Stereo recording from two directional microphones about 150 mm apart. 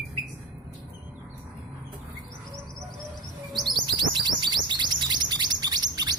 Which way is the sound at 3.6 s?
30° right (ahead or behind).